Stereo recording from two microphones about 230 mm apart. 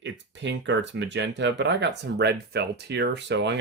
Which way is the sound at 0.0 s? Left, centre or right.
Right.